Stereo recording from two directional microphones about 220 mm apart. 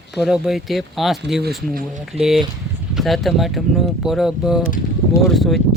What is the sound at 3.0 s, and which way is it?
Speech, centre (ahead or behind).